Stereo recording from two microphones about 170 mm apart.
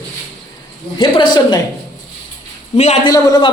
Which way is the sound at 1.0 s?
30° left (ahead or behind).